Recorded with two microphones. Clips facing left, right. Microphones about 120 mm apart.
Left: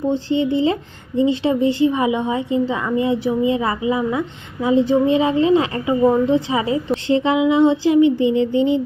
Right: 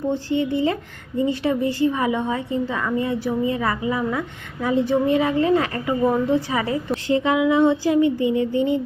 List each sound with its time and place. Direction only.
0.3 s a woman's voice: 25° left (ahead or behind)